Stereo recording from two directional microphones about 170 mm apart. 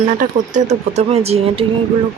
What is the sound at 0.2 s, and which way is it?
Speech, 45° right (ahead or behind).